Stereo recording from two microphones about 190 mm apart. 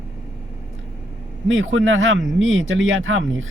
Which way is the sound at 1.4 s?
90° right.